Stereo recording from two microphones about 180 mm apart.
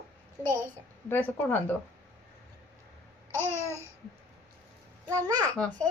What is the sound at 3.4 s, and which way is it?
Babbling, 15° left (ahead or behind).